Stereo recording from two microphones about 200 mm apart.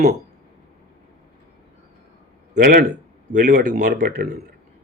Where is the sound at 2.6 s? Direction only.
50° right (ahead or behind).